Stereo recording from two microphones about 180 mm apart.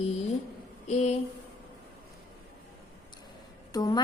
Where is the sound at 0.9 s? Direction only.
40° left (ahead or behind).